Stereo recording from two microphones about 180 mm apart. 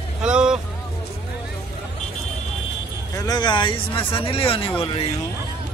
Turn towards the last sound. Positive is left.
turn(degrees=30)  # may be behind; listen again after turning